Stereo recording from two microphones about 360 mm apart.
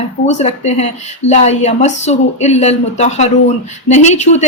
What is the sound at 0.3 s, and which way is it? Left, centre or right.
A woman's voice, centre.